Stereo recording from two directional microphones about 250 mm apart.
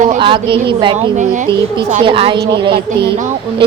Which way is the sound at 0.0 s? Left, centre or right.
Right.